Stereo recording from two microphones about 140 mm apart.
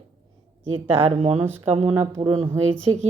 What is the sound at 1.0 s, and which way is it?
A woman's voice, 50° right (ahead or behind).